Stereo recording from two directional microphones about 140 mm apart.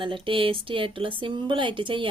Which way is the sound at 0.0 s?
40° right (ahead or behind).